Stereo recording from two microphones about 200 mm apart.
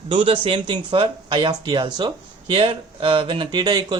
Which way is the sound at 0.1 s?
25° right (ahead or behind).